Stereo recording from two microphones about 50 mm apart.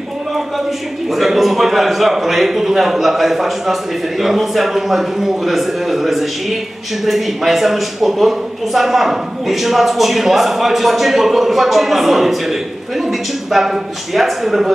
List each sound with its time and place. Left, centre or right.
1.1 s a man's voice: centre